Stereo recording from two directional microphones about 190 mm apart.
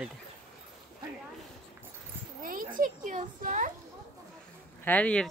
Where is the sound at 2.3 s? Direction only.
50° right (ahead or behind).